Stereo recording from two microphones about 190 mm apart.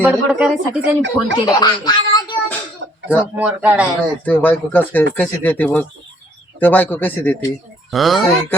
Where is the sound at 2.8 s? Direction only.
70° right (ahead or behind).